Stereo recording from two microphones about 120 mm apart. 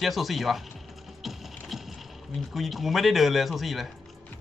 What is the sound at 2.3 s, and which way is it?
Speech, centre (ahead or behind).